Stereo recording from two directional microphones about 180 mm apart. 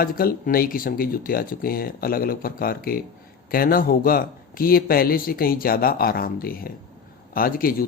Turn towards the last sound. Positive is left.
turn(degrees=55)  # may be behind; listen again after turning